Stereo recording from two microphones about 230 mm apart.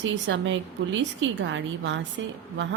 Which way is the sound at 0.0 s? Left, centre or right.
Right.